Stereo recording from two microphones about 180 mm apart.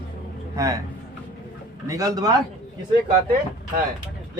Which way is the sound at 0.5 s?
15° right (ahead or behind).